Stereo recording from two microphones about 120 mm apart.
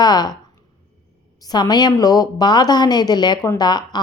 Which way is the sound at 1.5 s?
35° left (ahead or behind).